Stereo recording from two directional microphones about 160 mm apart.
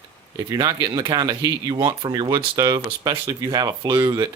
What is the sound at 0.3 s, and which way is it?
Speech, 25° right (ahead or behind).